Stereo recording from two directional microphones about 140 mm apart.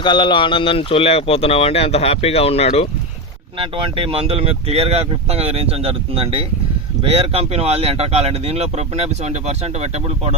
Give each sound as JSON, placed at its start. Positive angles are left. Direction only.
{"t": 0.0, "sound": "speech", "side_deg": 35}
{"t": 3.6, "sound": "speech", "side_deg": -40}